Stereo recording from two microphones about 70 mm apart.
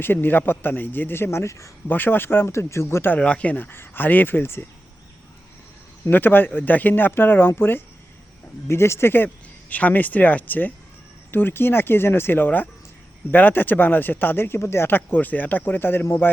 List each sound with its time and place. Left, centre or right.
0.0 s a man's voice: left
1.9 s a man's voice: left
3.1 s speech: centre; by 4.6 s left
6.1 s a man's voice: left